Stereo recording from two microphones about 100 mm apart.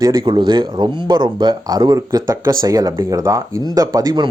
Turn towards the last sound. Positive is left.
turn(degrees=-40)  # may be behind; listen again after turning